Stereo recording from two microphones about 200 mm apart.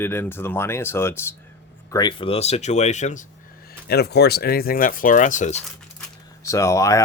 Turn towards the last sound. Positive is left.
turn(degrees=15)  # may be behind; listen again after turning